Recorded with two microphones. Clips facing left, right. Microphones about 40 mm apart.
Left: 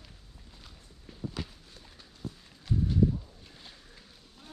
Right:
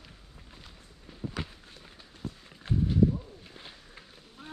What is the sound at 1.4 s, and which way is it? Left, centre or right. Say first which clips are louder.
Run: right 2 dB; right.